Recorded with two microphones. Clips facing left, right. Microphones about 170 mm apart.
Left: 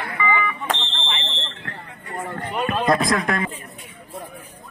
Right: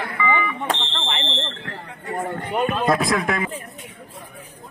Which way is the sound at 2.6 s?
Centre (ahead or behind).